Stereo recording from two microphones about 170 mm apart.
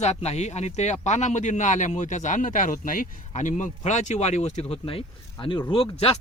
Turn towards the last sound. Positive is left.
turn(degrees=35)  # may be behind; listen again after turning